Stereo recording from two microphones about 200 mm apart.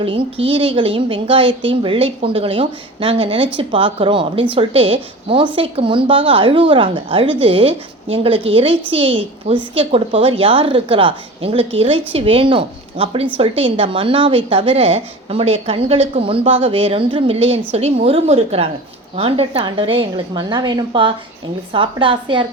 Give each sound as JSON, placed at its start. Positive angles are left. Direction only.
{"t": 0.0, "sound": "a woman's voice", "side_deg": -25}